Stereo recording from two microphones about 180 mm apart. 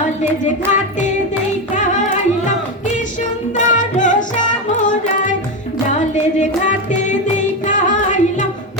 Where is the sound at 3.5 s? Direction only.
45° left (ahead or behind).